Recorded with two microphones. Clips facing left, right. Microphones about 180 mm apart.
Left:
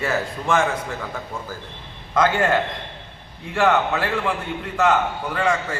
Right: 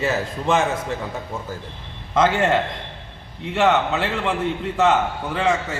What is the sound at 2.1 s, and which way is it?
A man's voice, 25° right (ahead or behind).